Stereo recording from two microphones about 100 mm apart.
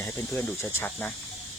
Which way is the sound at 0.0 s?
20° left (ahead or behind).